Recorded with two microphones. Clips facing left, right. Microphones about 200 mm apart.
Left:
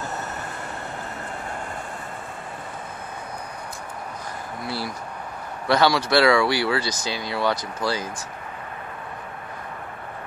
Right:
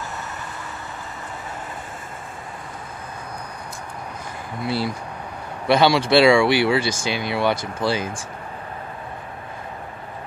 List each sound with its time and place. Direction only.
4.6 s speech: 20° right (ahead or behind)